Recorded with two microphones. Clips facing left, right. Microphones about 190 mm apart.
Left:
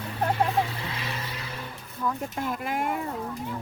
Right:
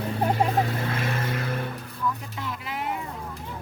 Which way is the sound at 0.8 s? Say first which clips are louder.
Right 6 dB; 50° right (ahead or behind).